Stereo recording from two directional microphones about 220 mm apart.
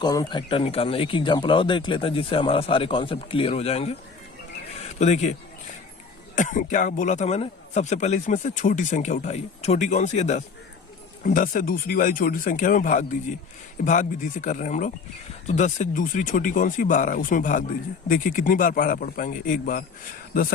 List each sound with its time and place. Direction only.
0.0 s speech: 15° left (ahead or behind); by 19.8 s 40° left (ahead or behind)